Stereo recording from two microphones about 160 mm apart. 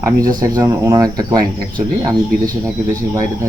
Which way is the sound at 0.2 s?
20° right (ahead or behind).